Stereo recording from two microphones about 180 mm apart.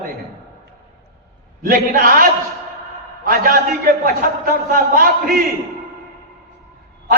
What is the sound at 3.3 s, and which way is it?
A man's voice, 55° right (ahead or behind).